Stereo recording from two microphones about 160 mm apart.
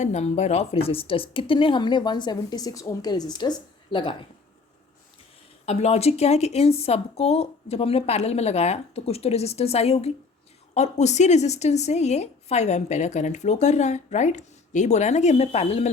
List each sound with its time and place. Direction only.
0.0 s speech: 45° left (ahead or behind)
5.6 s speech: 40° left (ahead or behind)